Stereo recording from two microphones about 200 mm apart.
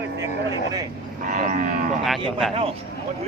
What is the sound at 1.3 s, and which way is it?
Livestock, 40° right (ahead or behind).